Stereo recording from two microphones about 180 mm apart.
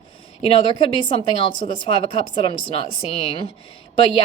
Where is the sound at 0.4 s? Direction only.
30° left (ahead or behind).